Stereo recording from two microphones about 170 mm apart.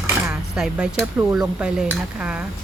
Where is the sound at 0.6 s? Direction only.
5° right (ahead or behind).